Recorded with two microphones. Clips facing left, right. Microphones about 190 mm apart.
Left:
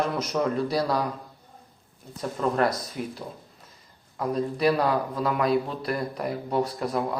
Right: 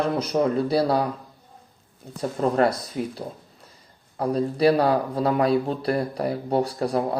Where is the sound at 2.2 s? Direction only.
35° right (ahead or behind).